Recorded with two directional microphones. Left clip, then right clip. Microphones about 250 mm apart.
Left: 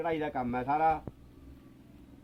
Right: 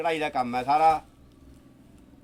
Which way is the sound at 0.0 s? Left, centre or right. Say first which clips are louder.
Right 6 dB; centre.